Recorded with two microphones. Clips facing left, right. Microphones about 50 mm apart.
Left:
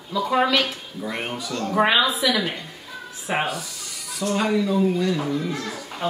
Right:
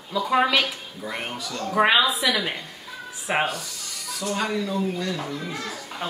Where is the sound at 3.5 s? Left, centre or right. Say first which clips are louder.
Left 2 dB; centre.